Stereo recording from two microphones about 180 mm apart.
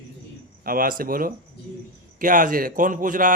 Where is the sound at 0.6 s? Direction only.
55° right (ahead or behind).